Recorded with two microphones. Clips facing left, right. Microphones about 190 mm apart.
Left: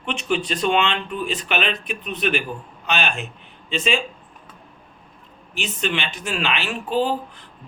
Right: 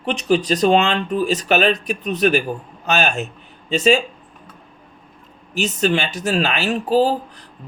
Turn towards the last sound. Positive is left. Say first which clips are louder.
# right 6 dB
turn(degrees=-35)  # may be behind; listen again after turning